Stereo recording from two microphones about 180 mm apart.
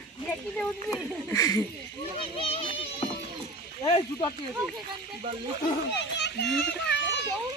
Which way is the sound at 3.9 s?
35° left (ahead or behind).